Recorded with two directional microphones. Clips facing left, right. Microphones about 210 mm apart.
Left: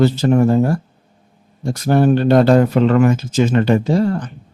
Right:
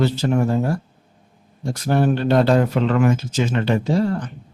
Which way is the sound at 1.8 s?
45° left (ahead or behind).